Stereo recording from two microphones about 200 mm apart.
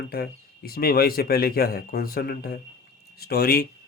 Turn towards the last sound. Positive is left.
turn(degrees=50)  # may be behind; listen again after turning